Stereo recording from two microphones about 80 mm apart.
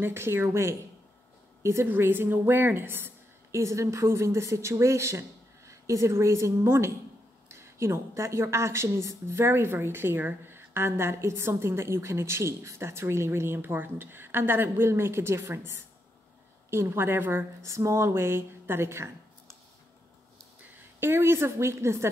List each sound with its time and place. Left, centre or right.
0.0 s a woman's voice: right
21.0 s a woman's voice: right